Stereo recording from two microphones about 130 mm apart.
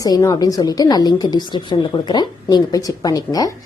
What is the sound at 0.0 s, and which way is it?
A woman's voice, 25° left (ahead or behind).